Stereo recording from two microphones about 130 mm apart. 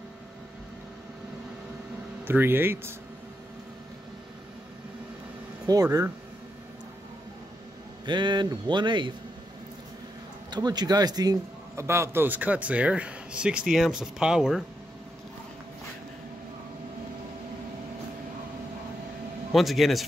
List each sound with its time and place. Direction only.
2.2 s a man's voice: 15° right (ahead or behind)
5.7 s speech: 25° right (ahead or behind)
8.0 s speech: 35° right (ahead or behind)
10.5 s a man's voice: 35° right (ahead or behind); by 14.6 s 5° right (ahead or behind)
19.5 s a man's voice: centre (ahead or behind)